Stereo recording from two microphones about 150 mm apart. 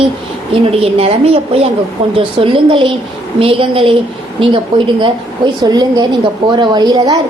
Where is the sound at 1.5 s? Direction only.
40° right (ahead or behind).